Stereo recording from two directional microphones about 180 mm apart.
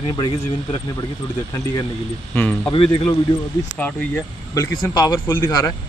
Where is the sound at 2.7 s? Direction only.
30° left (ahead or behind).